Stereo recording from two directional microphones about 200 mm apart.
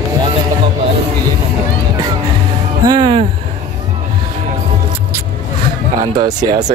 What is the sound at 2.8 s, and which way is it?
Speech, 20° right (ahead or behind).